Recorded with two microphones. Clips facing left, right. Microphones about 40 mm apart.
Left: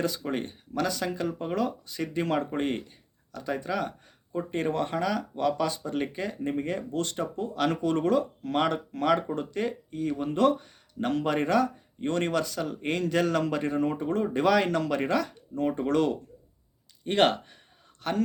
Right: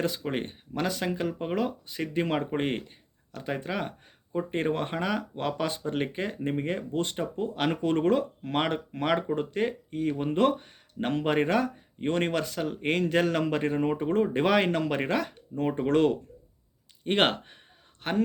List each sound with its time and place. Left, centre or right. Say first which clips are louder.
0.0 s speech: even; right